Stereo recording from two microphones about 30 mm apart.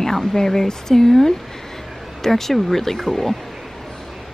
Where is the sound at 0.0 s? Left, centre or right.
Centre.